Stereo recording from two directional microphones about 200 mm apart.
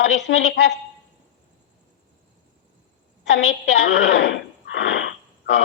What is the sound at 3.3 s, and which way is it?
A man's voice, 60° left (ahead or behind).